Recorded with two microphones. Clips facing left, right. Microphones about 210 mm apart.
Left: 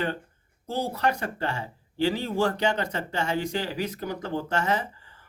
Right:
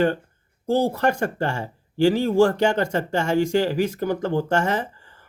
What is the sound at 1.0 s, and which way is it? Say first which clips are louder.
Speech: right 5 dB; 50° right (ahead or behind).